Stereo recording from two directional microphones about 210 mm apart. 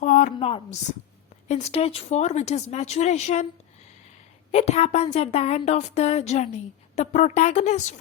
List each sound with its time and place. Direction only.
0.0 s a woman's voice: 35° left (ahead or behind)
0.3 s a woman's voice: 25° left (ahead or behind)
4.5 s speech: 30° left (ahead or behind)